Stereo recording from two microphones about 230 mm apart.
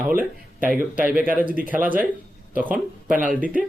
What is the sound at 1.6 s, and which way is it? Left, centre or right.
Speech, right.